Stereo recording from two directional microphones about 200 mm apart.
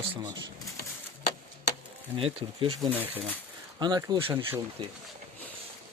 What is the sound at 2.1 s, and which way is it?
Speech, 25° right (ahead or behind).